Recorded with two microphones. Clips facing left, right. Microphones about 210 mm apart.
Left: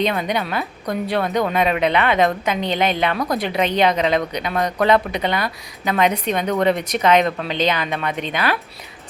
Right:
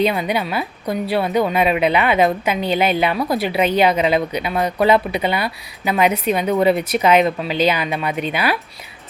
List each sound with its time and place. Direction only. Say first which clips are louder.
0.0 s a woman's voice: right 2 dB; 10° right (ahead or behind)